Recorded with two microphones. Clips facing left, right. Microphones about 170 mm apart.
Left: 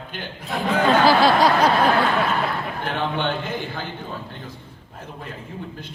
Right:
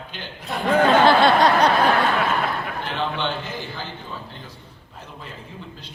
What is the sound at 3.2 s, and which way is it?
Speech, 50° left (ahead or behind).